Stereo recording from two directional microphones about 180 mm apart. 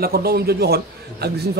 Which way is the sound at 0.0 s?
60° right (ahead or behind).